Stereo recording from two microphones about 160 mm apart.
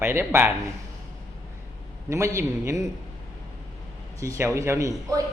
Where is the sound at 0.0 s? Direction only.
15° right (ahead or behind).